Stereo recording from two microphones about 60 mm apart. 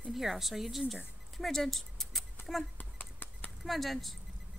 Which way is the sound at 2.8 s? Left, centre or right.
Left.